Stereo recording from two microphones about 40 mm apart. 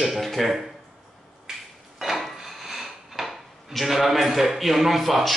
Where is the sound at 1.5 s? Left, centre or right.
Centre.